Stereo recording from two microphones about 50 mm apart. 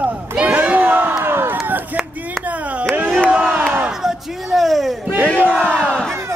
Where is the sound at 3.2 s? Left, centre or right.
Right.